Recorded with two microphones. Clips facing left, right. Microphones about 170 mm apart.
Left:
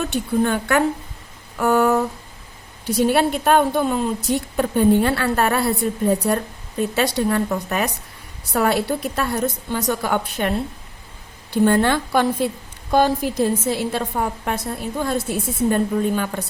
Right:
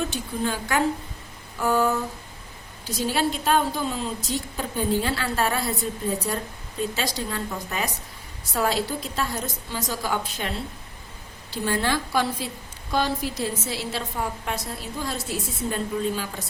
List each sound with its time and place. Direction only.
0.1 s a woman's voice: 60° left (ahead or behind)
1.5 s a sound: 65° left (ahead or behind)
2.8 s a woman's voice: 60° left (ahead or behind)